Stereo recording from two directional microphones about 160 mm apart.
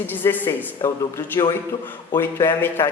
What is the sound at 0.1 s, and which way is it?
A woman's voice, 10° left (ahead or behind).